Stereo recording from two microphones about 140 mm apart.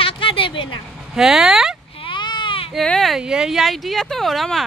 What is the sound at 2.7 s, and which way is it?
Speech, centre (ahead or behind).